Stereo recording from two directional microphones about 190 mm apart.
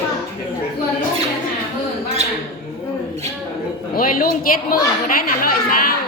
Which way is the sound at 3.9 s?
50° left (ahead or behind).